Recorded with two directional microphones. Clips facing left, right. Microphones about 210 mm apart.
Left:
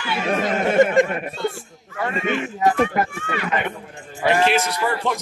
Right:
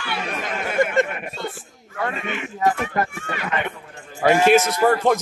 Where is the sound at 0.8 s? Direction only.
20° left (ahead or behind).